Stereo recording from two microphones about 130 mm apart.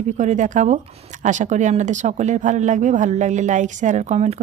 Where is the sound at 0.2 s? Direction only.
70° right (ahead or behind).